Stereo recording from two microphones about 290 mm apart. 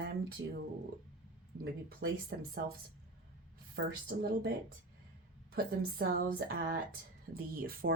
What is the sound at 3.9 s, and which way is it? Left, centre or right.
Speech, right.